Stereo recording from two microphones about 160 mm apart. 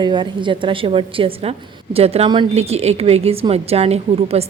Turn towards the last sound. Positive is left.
turn(degrees=-40)  # may be behind; listen again after turning